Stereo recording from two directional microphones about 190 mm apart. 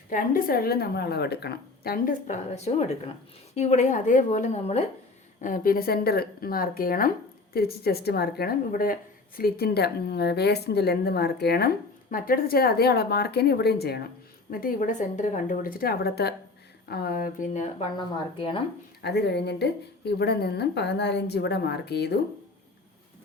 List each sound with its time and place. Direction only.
0.1 s a woman's voice: 45° left (ahead or behind)
2.2 s a woman's voice: 40° left (ahead or behind); by 14.0 s 55° left (ahead or behind)
14.5 s a woman's voice: 45° left (ahead or behind); by 18.6 s 25° left (ahead or behind)
19.0 s a woman's voice: 60° left (ahead or behind)